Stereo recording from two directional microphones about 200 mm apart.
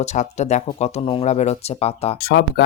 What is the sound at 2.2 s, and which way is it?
Speech, 50° left (ahead or behind).